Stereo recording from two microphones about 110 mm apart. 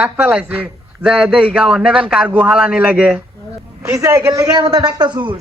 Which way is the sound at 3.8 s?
30° right (ahead or behind).